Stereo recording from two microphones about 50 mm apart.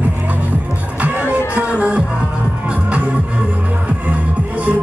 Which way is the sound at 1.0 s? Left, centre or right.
Right.